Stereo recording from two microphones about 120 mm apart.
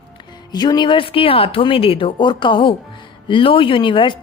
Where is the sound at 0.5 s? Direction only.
35° left (ahead or behind).